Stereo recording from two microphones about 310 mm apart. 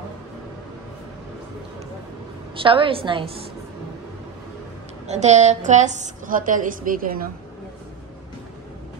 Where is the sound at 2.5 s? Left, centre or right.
Centre.